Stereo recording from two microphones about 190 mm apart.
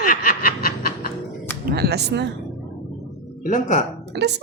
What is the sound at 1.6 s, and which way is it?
Music, 55° right (ahead or behind).